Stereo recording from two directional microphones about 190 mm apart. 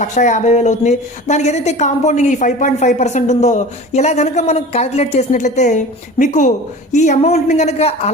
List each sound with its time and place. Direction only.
0.0 s a woman's voice: 40° left (ahead or behind)